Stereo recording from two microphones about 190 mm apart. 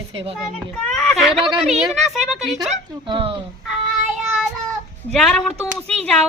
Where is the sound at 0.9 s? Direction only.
Centre (ahead or behind).